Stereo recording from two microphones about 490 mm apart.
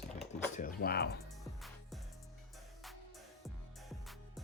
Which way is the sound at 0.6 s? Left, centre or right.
Centre.